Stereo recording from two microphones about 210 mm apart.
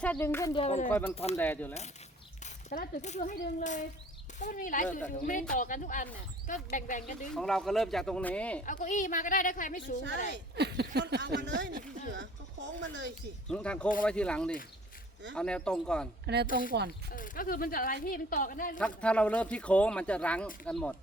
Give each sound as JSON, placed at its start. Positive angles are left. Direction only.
{"t": 0.0, "sound": "speech", "side_deg": 5}
{"t": 0.5, "sound": "speech", "side_deg": 30}
{"t": 0.9, "sound": "speech", "side_deg": 10}
{"t": 1.1, "sound": "speech", "side_deg": 30}
{"t": 1.4, "sound": "speech", "side_deg": 10}
{"t": 2.4, "sound": "speech", "side_deg": 40}
{"t": 7.3, "sound": "speech", "side_deg": 5}
{"t": 8.6, "sound": "speech", "side_deg": 35}
{"t": 10.2, "sound": "speech", "side_deg": -55}
{"t": 13.5, "sound": "speech", "side_deg": 5}
{"t": 16.2, "sound": "speech", "side_deg": -50}
{"t": 17.1, "sound": "speech", "side_deg": 40}
{"t": 19.0, "sound": "speech", "side_deg": 5}